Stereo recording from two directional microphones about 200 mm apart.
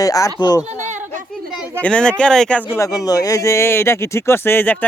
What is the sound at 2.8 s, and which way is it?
Speech, 15° left (ahead or behind).